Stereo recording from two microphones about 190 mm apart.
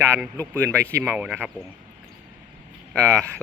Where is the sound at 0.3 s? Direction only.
15° right (ahead or behind).